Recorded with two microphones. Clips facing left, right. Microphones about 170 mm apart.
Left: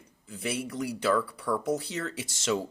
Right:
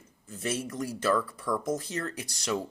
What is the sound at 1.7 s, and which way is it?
Speech, 80° left.